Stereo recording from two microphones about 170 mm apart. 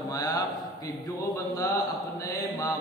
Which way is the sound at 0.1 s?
20° left (ahead or behind).